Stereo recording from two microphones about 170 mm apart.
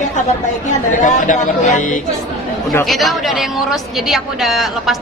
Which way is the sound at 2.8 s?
Centre (ahead or behind).